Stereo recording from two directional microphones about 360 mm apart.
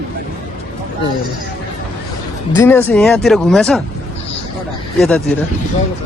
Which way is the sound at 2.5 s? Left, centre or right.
Centre.